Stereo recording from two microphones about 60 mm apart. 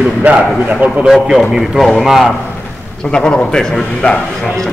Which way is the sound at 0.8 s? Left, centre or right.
Centre.